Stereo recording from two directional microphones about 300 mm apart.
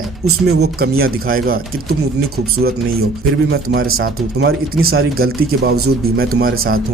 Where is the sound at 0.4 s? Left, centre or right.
Right.